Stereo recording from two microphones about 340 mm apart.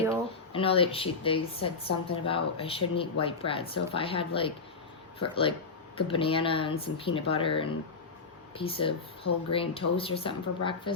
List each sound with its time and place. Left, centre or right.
0.5 s speech: centre